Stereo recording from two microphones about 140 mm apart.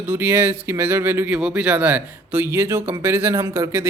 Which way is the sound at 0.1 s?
15° right (ahead or behind).